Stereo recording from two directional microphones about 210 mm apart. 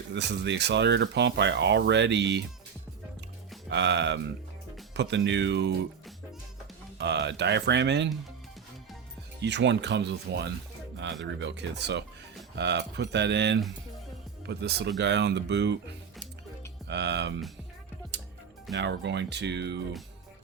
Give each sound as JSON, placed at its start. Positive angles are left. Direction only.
{"t": 0.1, "sound": "speech", "side_deg": -55}
{"t": 3.7, "sound": "speech", "side_deg": -55}
{"t": 7.0, "sound": "speech", "side_deg": -55}
{"t": 9.4, "sound": "speech", "side_deg": -55}
{"t": 16.9, "sound": "speech", "side_deg": -55}
{"t": 18.8, "sound": "speech", "side_deg": -55}